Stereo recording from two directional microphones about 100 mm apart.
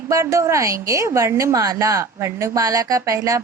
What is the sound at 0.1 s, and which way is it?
A child's voice, 30° right (ahead or behind).